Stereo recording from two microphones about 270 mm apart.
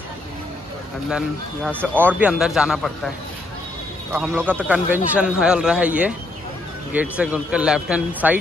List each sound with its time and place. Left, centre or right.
1.1 s a man's voice: centre
4.1 s a man's voice: centre